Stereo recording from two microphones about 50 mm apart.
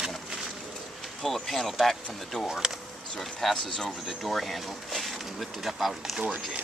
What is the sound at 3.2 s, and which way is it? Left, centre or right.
Speech, centre.